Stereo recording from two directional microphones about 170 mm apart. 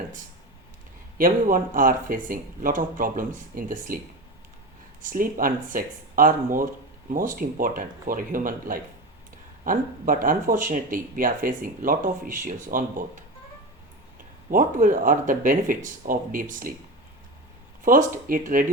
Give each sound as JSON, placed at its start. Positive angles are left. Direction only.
{"t": 1.2, "sound": "speech", "side_deg": -55}
{"t": 5.0, "sound": "speech", "side_deg": -55}
{"t": 14.5, "sound": "speech", "side_deg": -50}
{"t": 17.8, "sound": "speech", "side_deg": -55}